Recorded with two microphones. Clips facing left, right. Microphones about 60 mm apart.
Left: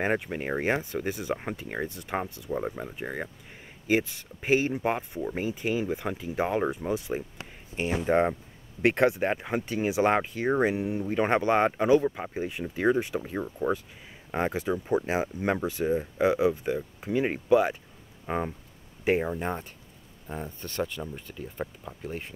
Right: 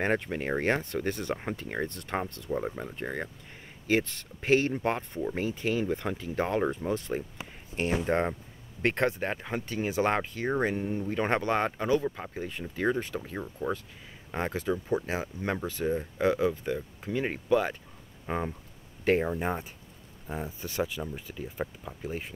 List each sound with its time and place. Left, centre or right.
0.0 s speech: centre
19.3 s speech: centre